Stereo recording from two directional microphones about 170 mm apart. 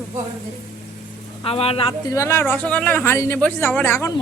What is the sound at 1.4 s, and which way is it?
Speech, 35° left (ahead or behind).